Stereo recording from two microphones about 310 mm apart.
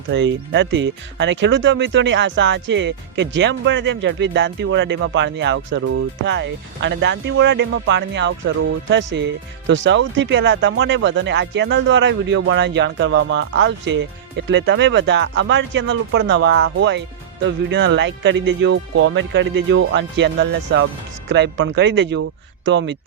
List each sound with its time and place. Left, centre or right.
0.1 s speech: right